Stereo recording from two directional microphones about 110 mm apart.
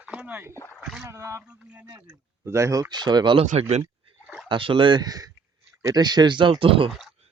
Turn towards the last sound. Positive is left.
turn(degrees=-55)  # may be behind; listen again after turning